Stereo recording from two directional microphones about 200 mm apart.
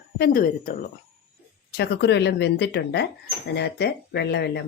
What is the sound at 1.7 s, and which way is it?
A woman's voice, 55° left (ahead or behind).